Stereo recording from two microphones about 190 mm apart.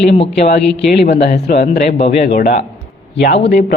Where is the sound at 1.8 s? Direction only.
35° left (ahead or behind).